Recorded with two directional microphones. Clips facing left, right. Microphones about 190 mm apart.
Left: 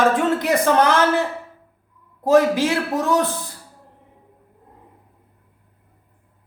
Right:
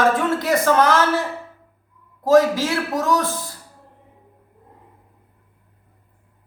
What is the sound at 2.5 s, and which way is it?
Speech, 15° left (ahead or behind).